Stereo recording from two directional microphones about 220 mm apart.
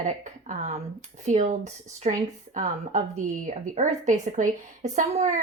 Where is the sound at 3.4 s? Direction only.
35° right (ahead or behind).